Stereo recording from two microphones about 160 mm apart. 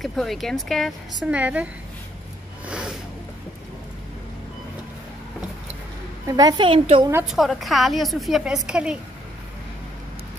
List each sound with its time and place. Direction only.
0.0 s speech: centre (ahead or behind)
2.6 s snort: 5° right (ahead or behind)
6.2 s a woman's voice: 25° right (ahead or behind)
7.2 s speech: centre (ahead or behind)